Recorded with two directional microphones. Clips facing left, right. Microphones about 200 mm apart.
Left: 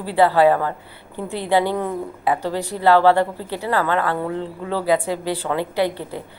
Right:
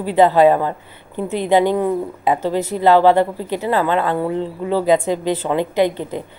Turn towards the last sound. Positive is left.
turn(degrees=-20)  # may be behind; listen again after turning